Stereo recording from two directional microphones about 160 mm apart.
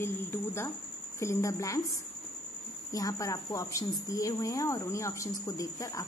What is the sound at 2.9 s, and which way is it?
Speech, 20° left (ahead or behind).